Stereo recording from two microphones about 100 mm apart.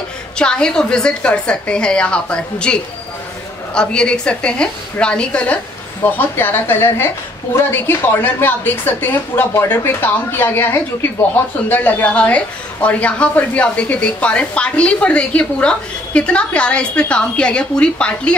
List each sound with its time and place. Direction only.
0.4 s a woman's voice: 10° left (ahead or behind)